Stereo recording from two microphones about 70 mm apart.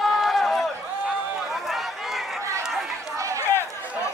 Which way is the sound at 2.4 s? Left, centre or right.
Right.